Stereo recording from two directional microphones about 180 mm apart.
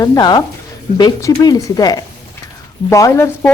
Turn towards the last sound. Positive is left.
turn(degrees=15)  # may be behind; listen again after turning